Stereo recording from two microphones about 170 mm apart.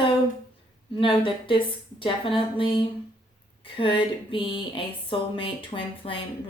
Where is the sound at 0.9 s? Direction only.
30° left (ahead or behind).